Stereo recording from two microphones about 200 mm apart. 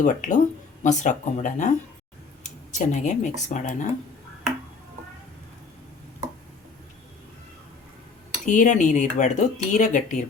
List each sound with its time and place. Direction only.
0.0 s speech: 40° left (ahead or behind)
8.4 s speech: 40° left (ahead or behind)